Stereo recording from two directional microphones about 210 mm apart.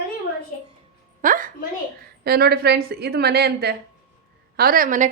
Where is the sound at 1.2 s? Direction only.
40° right (ahead or behind).